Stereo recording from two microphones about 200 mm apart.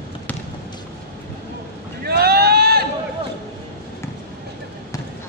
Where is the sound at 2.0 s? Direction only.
50° right (ahead or behind).